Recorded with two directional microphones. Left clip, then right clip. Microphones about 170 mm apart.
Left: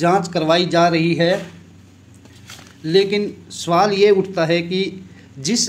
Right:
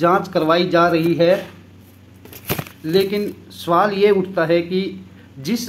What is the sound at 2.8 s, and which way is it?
Speech, 20° left (ahead or behind).